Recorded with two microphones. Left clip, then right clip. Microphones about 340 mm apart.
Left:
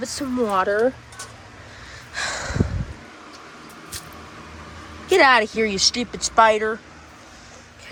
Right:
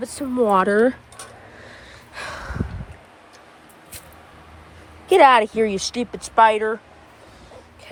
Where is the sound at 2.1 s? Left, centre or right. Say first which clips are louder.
Left 5 dB; centre.